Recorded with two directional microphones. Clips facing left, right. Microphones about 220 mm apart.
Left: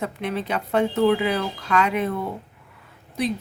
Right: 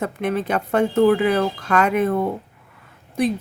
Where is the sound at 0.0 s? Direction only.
50° right (ahead or behind).